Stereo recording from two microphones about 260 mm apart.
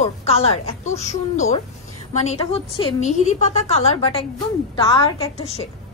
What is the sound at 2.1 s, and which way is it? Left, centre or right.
A woman's voice, left.